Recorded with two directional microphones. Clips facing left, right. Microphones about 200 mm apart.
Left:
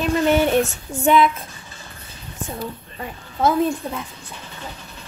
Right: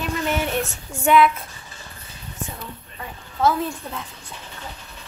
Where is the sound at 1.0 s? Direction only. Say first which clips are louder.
Even; 20° left (ahead or behind).